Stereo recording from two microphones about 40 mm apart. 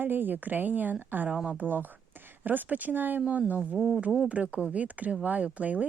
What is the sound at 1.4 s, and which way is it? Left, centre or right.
Speech, right.